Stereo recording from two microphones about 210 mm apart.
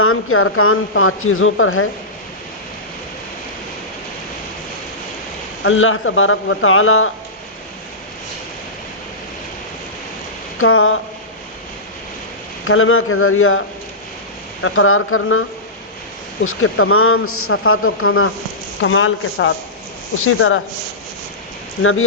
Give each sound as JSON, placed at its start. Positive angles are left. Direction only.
{"t": 0.0, "sound": "speech", "side_deg": 85}
{"t": 5.6, "sound": "speech", "side_deg": 70}
{"t": 10.6, "sound": "a man's voice", "side_deg": 80}
{"t": 12.6, "sound": "a man's voice", "side_deg": 80}
{"t": 21.8, "sound": "speech", "side_deg": 75}